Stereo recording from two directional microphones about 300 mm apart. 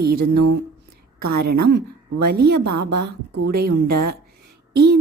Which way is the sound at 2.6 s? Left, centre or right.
Right.